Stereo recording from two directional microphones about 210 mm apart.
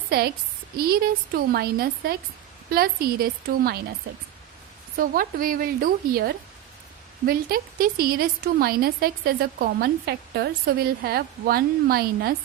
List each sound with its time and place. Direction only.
0.1 s a woman's voice: 50° right (ahead or behind)
4.9 s a woman's voice: 40° right (ahead or behind)